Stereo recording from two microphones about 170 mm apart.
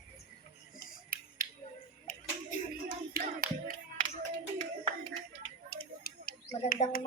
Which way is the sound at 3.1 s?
60° right (ahead or behind).